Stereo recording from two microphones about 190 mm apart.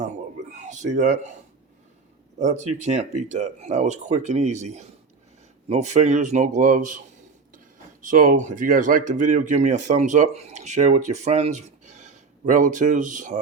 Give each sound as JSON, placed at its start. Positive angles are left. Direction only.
{"t": 0.5, "sound": "speech", "side_deg": -40}
{"t": 2.4, "sound": "speech", "side_deg": -40}
{"t": 8.0, "sound": "speech", "side_deg": -45}